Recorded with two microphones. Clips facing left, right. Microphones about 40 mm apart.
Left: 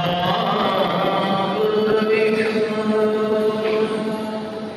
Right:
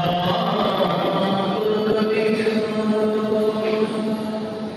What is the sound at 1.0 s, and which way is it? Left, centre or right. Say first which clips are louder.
Music: left 1 dB; left.